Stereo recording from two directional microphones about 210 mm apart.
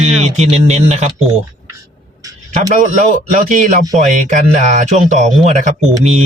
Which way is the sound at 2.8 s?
35° right (ahead or behind).